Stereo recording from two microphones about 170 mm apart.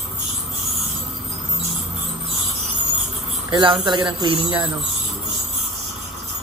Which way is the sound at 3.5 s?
30° right (ahead or behind).